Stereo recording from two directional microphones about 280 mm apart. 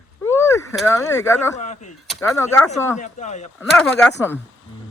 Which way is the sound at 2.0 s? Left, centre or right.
Centre.